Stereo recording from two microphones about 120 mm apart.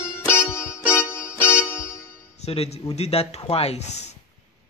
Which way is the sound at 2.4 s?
55° left (ahead or behind).